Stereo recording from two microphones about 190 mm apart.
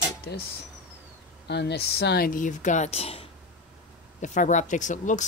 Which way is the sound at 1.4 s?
60° left (ahead or behind).